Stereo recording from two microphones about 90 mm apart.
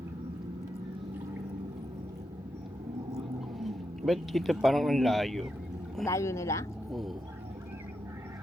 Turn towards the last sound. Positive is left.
turn(degrees=0)  # may be behind; listen again after turning